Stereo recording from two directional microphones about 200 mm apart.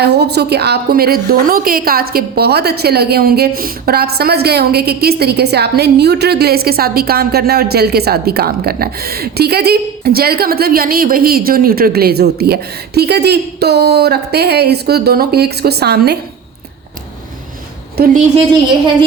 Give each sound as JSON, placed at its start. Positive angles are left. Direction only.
{"t": 0.0, "sound": "a woman's voice", "side_deg": -55}
{"t": 17.9, "sound": "a woman's voice", "side_deg": -45}